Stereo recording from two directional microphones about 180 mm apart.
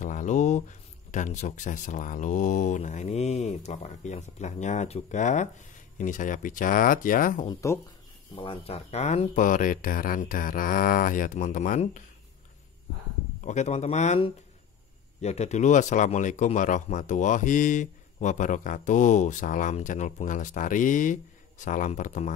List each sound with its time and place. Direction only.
0.0 s speech: 45° left (ahead or behind)
7.4 s speech: 15° left (ahead or behind)
8.4 s speech: 30° left (ahead or behind)
13.4 s speech: 40° left (ahead or behind)